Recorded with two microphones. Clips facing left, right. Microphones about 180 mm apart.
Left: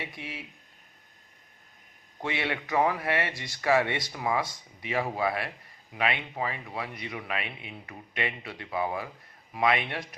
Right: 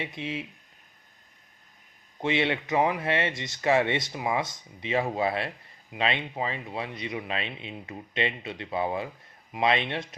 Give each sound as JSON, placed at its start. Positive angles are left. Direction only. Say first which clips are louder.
{"t": 0.0, "sound": "speech", "louder": "right 6 dB", "side_deg": -20}
{"t": 2.2, "sound": "speech", "louder": "right 5 dB", "side_deg": -20}